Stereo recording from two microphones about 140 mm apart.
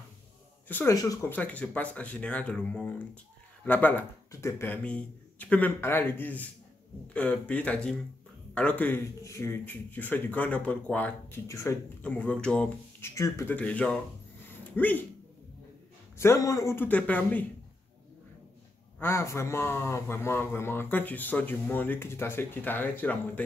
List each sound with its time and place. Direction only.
0.7 s speech: 15° left (ahead or behind)
0.9 s speech: 25° left (ahead or behind)
1.3 s a man's voice: 10° left (ahead or behind)
13.1 s a man's voice: 20° left (ahead or behind)
16.2 s a man's voice: 20° left (ahead or behind)
18.9 s a man's voice: 15° left (ahead or behind)